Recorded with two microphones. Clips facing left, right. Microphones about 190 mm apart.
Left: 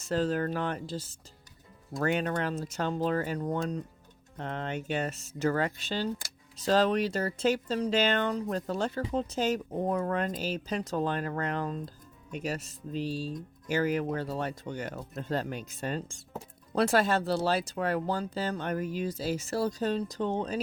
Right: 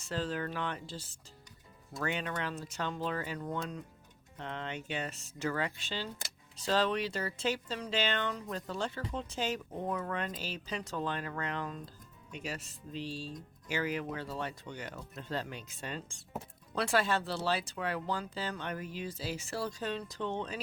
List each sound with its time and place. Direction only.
0.0 s speech: 45° left (ahead or behind)